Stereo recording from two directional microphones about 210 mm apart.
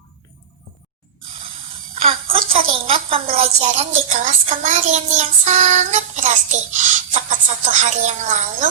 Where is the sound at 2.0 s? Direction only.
25° right (ahead or behind).